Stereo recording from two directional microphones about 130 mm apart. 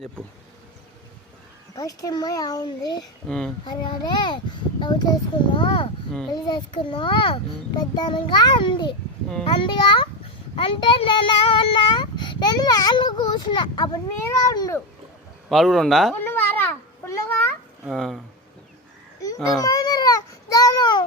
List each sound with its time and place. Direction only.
1.7 s a child's voice: 30° left (ahead or behind)
3.2 s speech: 5° left (ahead or behind)
3.6 s speech: 35° left (ahead or behind)
14.3 s a child's voice: 25° left (ahead or behind)
15.4 s speech: centre (ahead or behind)
16.2 s babbling: 15° left (ahead or behind)
17.8 s speech: centre (ahead or behind)
19.6 s baby cry: 30° left (ahead or behind)